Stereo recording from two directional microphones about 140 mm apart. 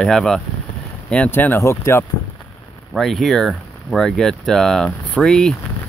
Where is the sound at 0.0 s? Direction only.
5° left (ahead or behind).